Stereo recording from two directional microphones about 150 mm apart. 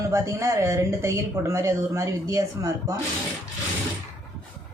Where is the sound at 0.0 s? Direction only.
20° right (ahead or behind).